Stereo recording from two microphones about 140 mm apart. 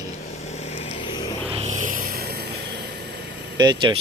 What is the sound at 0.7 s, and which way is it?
Vehicle, 50° left (ahead or behind).